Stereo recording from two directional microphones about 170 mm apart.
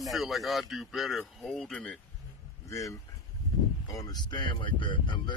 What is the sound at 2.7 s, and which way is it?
Speech, 20° left (ahead or behind).